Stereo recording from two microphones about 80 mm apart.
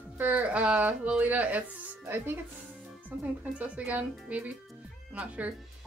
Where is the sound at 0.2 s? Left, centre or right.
Centre.